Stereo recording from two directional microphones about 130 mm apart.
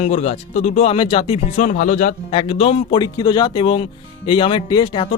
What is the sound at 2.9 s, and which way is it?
Speech, 35° left (ahead or behind).